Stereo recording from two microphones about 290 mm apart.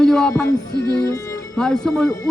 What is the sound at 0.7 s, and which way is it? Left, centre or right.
Music, left.